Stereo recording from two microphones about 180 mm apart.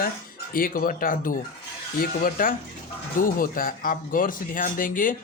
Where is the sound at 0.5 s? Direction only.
50° left (ahead or behind).